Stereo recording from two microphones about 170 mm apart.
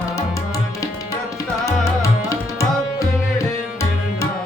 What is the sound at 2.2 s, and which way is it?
Tabla, 20° left (ahead or behind).